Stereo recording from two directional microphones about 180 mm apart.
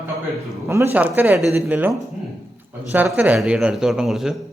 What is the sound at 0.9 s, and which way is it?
Speech, 10° right (ahead or behind).